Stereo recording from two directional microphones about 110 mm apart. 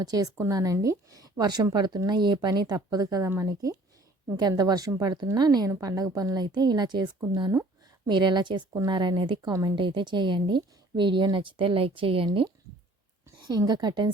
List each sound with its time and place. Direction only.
0.0 s speech: 35° right (ahead or behind)
3.2 s speech: 25° right (ahead or behind)
9.7 s speech: 50° right (ahead or behind)
13.5 s speech: 35° right (ahead or behind)